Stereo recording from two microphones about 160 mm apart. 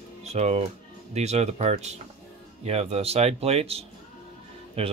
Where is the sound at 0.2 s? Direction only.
40° right (ahead or behind).